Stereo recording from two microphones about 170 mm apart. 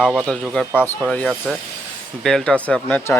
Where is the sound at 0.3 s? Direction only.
5° left (ahead or behind).